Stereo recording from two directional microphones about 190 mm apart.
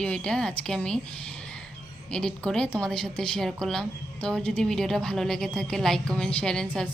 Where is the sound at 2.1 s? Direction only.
5° left (ahead or behind).